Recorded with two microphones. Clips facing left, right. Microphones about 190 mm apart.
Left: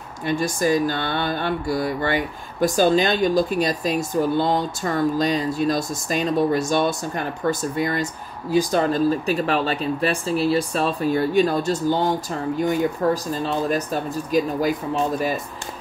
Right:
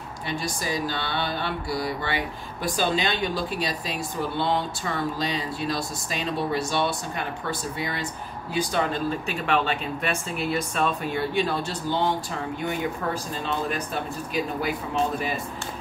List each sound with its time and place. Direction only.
0.3 s speech: 50° left (ahead or behind)